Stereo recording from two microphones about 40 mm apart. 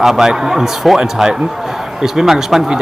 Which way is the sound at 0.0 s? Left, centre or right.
Centre.